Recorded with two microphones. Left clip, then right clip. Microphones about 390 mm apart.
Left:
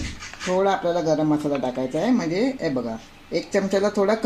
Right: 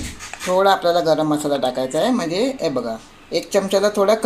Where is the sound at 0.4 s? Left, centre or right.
Right.